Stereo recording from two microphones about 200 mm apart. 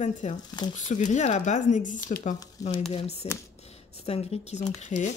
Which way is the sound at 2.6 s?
15° left (ahead or behind).